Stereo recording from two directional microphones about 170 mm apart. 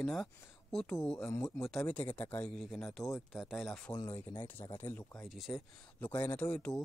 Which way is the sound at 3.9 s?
25° left (ahead or behind).